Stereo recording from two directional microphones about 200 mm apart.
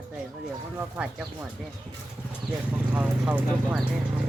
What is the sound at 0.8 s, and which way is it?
Speech, 5° right (ahead or behind).